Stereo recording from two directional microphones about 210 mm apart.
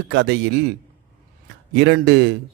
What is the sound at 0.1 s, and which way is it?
Speech, 55° right (ahead or behind).